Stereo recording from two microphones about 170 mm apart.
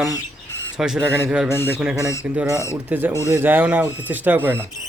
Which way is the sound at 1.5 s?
15° left (ahead or behind).